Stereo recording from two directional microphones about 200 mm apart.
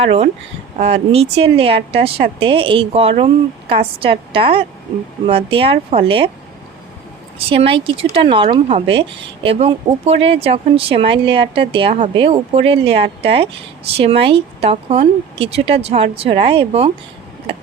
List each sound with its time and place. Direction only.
0.0 s speech: 30° right (ahead or behind)
7.3 s speech: 25° right (ahead or behind)